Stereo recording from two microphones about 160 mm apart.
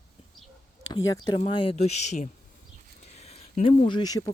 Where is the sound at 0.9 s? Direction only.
25° left (ahead or behind).